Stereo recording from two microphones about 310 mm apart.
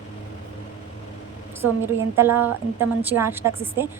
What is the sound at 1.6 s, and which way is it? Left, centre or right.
A woman's voice, centre.